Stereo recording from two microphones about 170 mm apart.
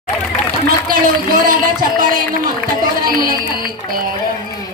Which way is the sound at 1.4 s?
55° right (ahead or behind).